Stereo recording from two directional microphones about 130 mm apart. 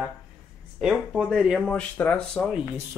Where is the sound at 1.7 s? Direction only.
10° left (ahead or behind).